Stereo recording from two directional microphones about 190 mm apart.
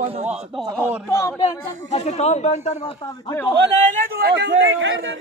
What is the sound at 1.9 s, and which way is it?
Speech, 35° left (ahead or behind).